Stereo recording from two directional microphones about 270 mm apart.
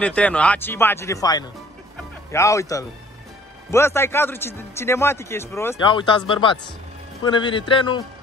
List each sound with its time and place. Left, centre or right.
0.0 s a man's voice: centre